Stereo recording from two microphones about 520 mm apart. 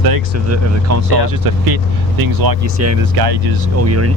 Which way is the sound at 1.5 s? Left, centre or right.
Right.